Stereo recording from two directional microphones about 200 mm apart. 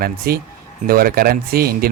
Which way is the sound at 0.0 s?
50° right (ahead or behind).